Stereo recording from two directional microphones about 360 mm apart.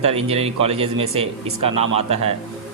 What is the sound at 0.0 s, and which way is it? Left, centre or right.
Speech, centre.